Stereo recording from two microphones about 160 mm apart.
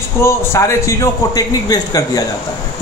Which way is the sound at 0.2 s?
15° left (ahead or behind).